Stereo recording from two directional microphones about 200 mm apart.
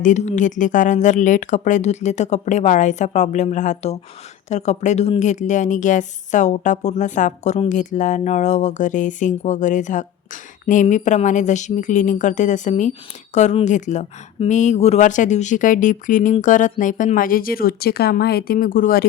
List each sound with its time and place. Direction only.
0.0 s a woman's voice: 35° left (ahead or behind)